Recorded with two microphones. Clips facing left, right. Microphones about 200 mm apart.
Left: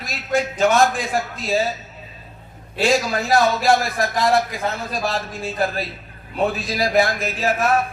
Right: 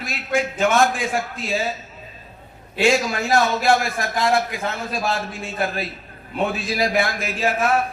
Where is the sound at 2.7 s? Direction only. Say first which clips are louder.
Even; 35° left (ahead or behind).